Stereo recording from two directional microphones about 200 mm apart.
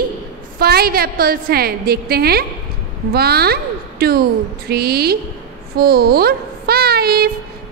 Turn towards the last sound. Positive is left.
turn(degrees=-50)  # may be behind; listen again after turning